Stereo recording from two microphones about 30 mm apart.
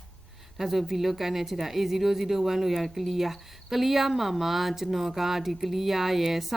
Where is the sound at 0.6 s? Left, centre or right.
Centre.